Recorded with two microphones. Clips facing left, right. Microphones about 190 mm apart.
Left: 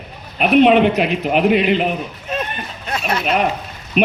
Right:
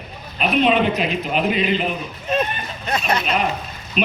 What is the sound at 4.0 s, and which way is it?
Speech, 60° left (ahead or behind).